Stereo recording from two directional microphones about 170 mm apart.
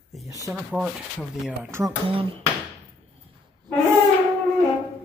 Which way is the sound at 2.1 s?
30° right (ahead or behind).